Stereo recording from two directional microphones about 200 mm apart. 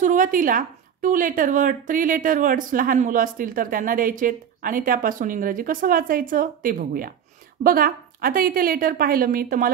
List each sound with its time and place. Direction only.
0.0 s a woman's voice: 40° right (ahead or behind)